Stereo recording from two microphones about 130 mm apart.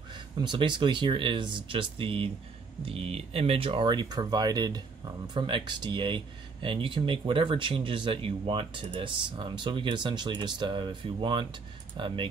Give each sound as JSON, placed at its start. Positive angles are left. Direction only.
{"t": 0.4, "sound": "speech", "side_deg": -35}